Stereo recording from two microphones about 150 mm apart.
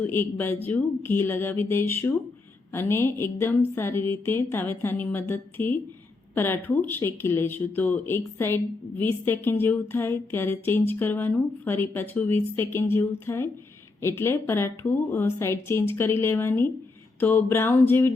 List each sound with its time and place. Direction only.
0.0 s speech: 15° left (ahead or behind)